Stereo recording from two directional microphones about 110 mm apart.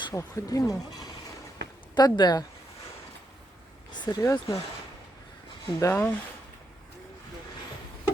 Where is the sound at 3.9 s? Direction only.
40° left (ahead or behind).